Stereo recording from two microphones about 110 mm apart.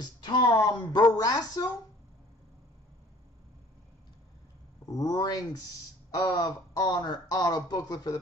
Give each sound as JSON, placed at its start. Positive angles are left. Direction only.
{"t": 0.0, "sound": "speech", "side_deg": 45}
{"t": 0.7, "sound": "a sound", "side_deg": 40}
{"t": 4.8, "sound": "speech", "side_deg": 35}